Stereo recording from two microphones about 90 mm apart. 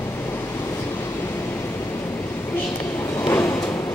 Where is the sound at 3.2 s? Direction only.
25° left (ahead or behind).